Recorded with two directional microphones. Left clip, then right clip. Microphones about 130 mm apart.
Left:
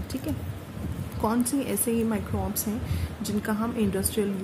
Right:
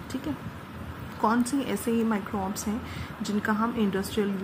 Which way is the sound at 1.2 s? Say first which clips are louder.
Right 1 dB; 15° right (ahead or behind).